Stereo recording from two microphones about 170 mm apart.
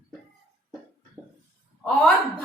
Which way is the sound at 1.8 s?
Centre (ahead or behind).